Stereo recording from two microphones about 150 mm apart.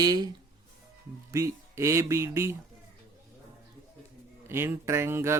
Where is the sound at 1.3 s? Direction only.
20° right (ahead or behind).